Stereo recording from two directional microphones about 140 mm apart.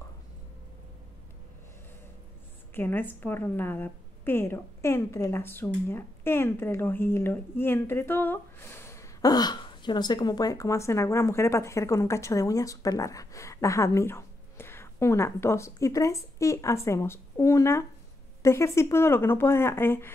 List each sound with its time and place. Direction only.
2.7 s a woman's voice: 15° left (ahead or behind)